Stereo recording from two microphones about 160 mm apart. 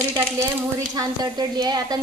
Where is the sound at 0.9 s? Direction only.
25° right (ahead or behind).